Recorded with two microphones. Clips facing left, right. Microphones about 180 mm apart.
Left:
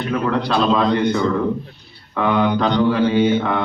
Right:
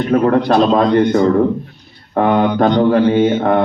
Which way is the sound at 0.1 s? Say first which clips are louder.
Right 8 dB; 50° right (ahead or behind).